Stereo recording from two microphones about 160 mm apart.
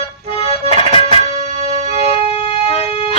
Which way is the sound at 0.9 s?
35° left (ahead or behind).